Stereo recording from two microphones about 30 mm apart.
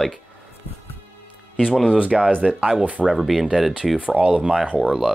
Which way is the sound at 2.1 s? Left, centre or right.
Centre.